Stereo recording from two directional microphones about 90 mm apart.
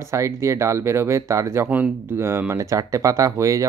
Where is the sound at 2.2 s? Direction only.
30° right (ahead or behind).